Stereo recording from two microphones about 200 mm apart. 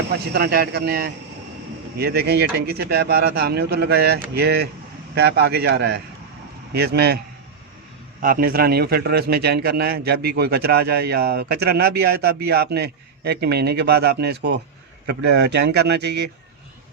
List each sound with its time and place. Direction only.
0.1 s a man's voice: 50° right (ahead or behind)
8.2 s a man's voice: 45° right (ahead or behind)